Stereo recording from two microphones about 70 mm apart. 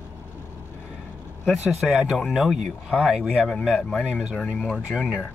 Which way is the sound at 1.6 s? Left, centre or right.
Centre.